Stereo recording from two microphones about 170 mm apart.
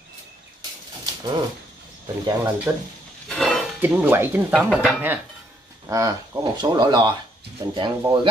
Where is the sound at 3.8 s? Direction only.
10° right (ahead or behind).